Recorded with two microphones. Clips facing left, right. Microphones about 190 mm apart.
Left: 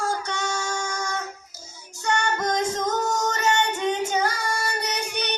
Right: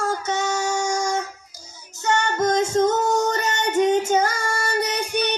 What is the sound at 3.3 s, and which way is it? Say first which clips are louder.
Female singing: right 2 dB; 45° right (ahead or behind).